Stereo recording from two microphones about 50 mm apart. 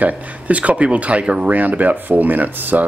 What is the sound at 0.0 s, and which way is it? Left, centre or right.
Speech, right.